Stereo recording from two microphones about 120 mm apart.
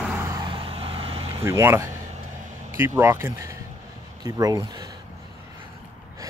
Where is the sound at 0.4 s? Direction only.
45° right (ahead or behind).